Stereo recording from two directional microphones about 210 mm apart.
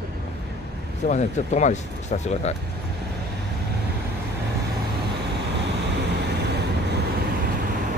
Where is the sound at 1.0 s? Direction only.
35° left (ahead or behind).